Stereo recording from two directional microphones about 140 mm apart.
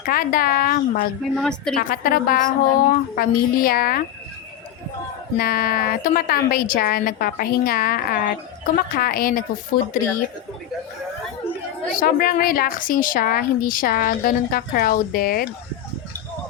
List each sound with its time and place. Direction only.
0.0 s a woman's voice: 90° left
1.4 s a woman's voice: 5° left (ahead or behind)
1.7 s a woman's voice: 90° left
5.4 s a woman's voice: 90° left
11.9 s a woman's voice: 85° left